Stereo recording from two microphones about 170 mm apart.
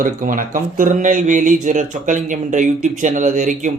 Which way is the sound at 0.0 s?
50° right (ahead or behind).